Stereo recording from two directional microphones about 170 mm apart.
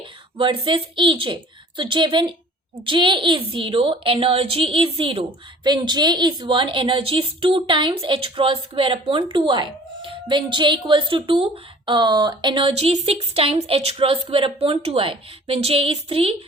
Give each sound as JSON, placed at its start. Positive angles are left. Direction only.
{"t": 0.0, "sound": "a woman's voice", "side_deg": -30}